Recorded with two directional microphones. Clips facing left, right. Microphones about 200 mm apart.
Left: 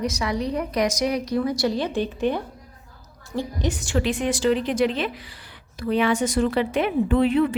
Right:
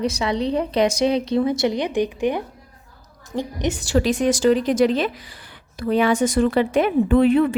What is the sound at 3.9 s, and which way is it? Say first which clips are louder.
A woman's voice: right 6 dB; 40° right (ahead or behind).